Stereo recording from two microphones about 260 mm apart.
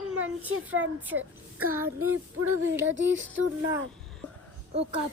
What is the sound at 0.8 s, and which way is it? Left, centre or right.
A child's voice, right.